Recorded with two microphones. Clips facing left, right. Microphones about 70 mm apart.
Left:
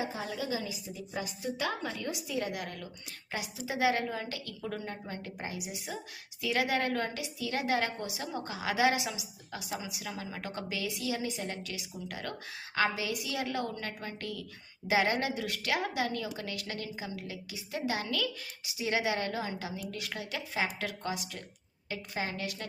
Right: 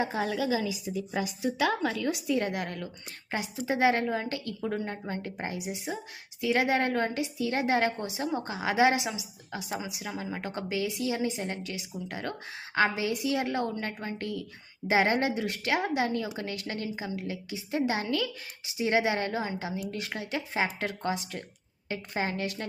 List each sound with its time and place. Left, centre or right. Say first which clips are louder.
0.0 s a woman's voice: right 7 dB; right